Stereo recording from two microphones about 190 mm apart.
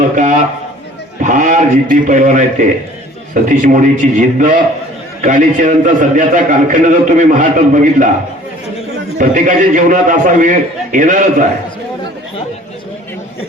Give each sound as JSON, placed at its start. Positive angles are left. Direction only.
{"t": 0.0, "sound": "a sound", "side_deg": -40}
{"t": 1.2, "sound": "a man's voice", "side_deg": -40}
{"t": 9.1, "sound": "a man's voice", "side_deg": -45}